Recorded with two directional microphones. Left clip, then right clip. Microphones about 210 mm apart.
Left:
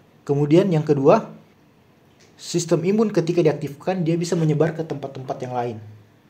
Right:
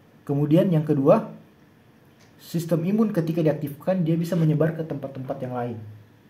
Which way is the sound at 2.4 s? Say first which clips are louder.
Left 6 dB; 35° left (ahead or behind).